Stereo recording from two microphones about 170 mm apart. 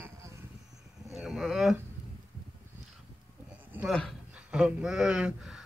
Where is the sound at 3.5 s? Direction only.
10° right (ahead or behind).